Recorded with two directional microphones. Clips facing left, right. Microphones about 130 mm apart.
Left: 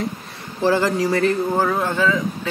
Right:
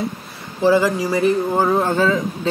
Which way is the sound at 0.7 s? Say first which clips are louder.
Right 2 dB; 10° right (ahead or behind).